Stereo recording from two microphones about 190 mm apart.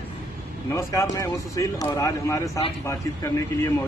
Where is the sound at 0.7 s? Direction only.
15° left (ahead or behind).